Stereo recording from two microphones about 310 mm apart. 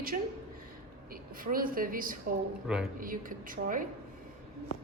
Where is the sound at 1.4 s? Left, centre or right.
Right.